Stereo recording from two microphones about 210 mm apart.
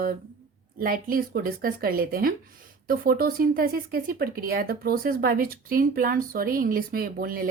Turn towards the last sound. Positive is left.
turn(degrees=-45)  # may be behind; listen again after turning